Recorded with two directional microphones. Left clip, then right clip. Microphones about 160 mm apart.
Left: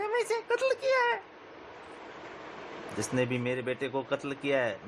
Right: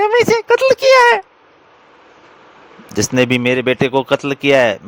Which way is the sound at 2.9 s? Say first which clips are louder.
Right 17 dB; 55° right (ahead or behind).